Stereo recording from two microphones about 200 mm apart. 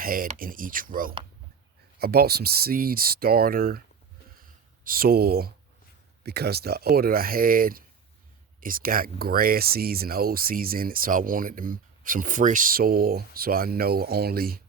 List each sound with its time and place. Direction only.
0.0 s speech: 45° right (ahead or behind)
4.4 s a sound: 45° right (ahead or behind)
6.2 s speech: 55° right (ahead or behind)